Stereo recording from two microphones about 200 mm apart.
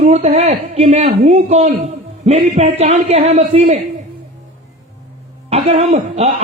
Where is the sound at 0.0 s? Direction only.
30° right (ahead or behind).